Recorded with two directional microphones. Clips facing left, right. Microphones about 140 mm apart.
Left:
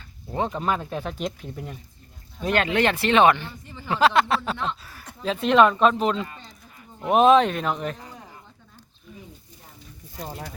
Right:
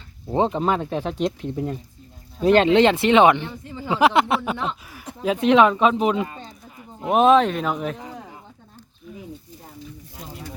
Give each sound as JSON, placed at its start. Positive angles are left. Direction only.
{"t": 0.3, "sound": "speech", "side_deg": -25}
{"t": 7.0, "sound": "speech", "side_deg": 0}